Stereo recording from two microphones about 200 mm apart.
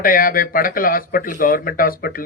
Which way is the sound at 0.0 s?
45° left (ahead or behind).